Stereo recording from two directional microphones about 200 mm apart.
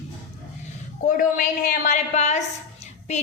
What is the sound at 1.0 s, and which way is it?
A woman's voice, 40° left (ahead or behind).